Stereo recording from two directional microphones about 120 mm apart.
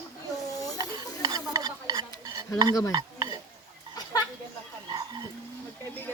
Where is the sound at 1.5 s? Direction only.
35° right (ahead or behind).